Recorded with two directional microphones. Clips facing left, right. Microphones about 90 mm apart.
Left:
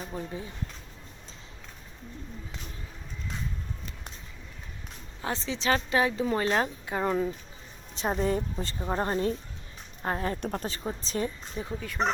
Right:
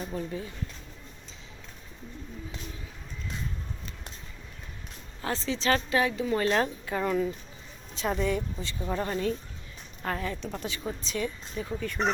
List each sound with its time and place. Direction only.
0.0 s a woman's voice: 15° left (ahead or behind)
5.2 s a woman's voice: 20° left (ahead or behind)
10.2 s speech: 45° left (ahead or behind)
10.8 s speech: 35° left (ahead or behind)
11.6 s a woman's voice: 25° left (ahead or behind)